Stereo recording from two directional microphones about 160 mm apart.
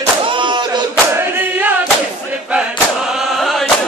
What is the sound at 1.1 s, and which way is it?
Choir, 10° right (ahead or behind).